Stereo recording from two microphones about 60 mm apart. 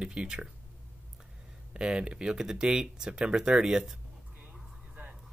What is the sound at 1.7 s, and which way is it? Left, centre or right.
Speech, centre.